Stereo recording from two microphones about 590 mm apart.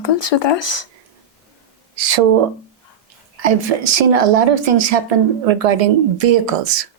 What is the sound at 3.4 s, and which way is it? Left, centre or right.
A woman's voice, right.